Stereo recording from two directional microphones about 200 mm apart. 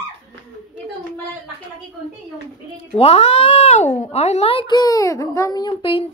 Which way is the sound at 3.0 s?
30° left (ahead or behind).